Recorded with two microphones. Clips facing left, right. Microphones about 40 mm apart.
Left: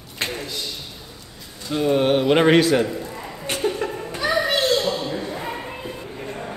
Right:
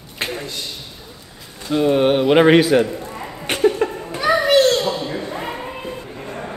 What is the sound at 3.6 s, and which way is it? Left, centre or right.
Laughter, centre.